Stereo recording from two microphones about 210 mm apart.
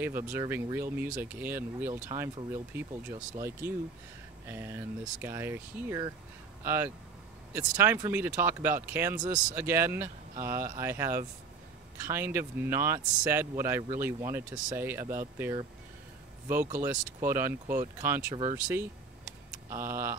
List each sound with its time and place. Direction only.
0.3 s speech: 15° right (ahead or behind)
16.7 s speech: 10° right (ahead or behind)